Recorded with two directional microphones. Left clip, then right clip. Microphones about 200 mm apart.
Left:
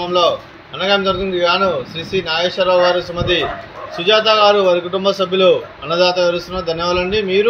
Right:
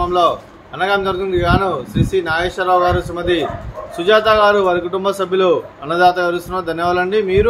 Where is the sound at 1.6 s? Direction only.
45° right (ahead or behind).